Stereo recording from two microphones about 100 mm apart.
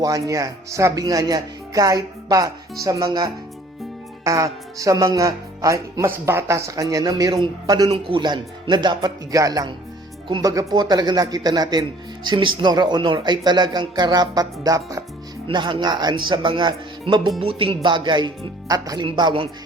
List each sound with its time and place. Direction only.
0.0 s speech: 35° right (ahead or behind)
3.1 s speech: 45° right (ahead or behind)
4.2 s speech: 30° right (ahead or behind)
7.9 s speech: 60° right (ahead or behind); by 10.7 s 35° right (ahead or behind)
10.8 s speech: 45° right (ahead or behind)
15.4 s speech: 55° right (ahead or behind)
17.4 s speech: 70° right (ahead or behind)
17.8 s speech: 50° right (ahead or behind)
18.7 s speech: 35° right (ahead or behind)
19.0 s speech: 55° right (ahead or behind)